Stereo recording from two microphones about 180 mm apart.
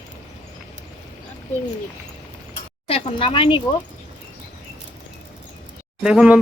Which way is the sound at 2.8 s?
30° left (ahead or behind).